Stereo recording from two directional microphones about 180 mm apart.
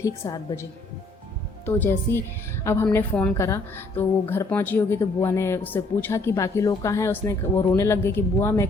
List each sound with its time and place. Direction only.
0.0 s a woman's voice: 15° left (ahead or behind)